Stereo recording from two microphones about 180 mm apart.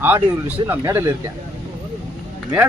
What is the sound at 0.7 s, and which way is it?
Speech, 15° right (ahead or behind).